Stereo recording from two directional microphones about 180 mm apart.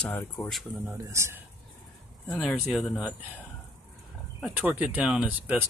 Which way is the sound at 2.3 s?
5° left (ahead or behind).